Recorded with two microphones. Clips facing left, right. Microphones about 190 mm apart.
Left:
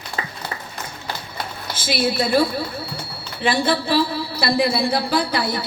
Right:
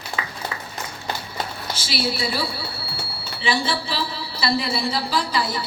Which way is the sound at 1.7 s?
50° left (ahead or behind).